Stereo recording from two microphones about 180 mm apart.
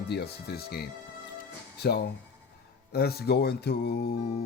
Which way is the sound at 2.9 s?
60° left (ahead or behind).